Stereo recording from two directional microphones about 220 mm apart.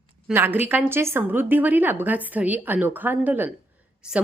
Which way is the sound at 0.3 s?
10° right (ahead or behind).